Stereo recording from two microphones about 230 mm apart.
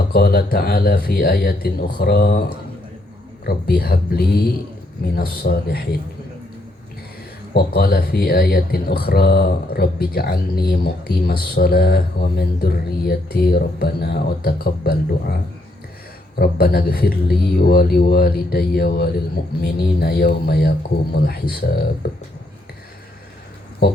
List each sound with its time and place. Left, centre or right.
0.1 s speech: left
3.4 s speech: left
7.5 s speech: left
16.4 s speech: left